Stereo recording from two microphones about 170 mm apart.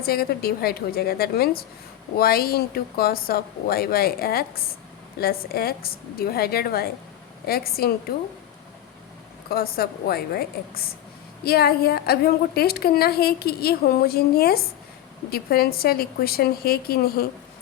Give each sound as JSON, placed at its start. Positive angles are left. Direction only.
{"t": 0.0, "sound": "a woman's voice", "side_deg": 65}
{"t": 9.5, "sound": "a woman's voice", "side_deg": 65}